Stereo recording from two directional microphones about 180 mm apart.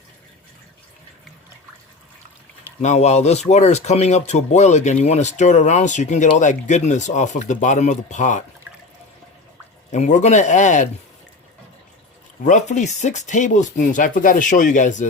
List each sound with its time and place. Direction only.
2.8 s speech: 40° left (ahead or behind)
9.9 s speech: 40° left (ahead or behind)
12.5 s speech: 40° left (ahead or behind)